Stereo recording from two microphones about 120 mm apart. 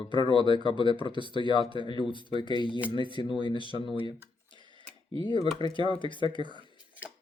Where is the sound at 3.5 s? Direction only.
40° right (ahead or behind).